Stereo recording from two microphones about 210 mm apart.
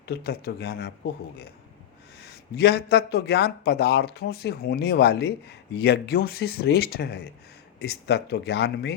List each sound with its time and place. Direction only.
0.0 s speech: 50° left (ahead or behind)
2.2 s speech: 50° left (ahead or behind)